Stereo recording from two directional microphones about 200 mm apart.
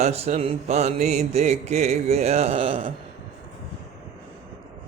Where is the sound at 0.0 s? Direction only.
35° right (ahead or behind).